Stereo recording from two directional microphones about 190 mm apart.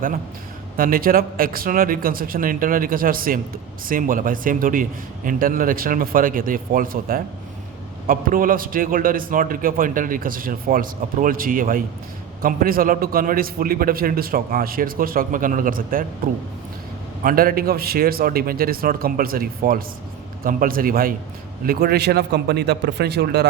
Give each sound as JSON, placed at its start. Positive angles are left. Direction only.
{"t": 0.8, "sound": "a man's voice", "side_deg": -50}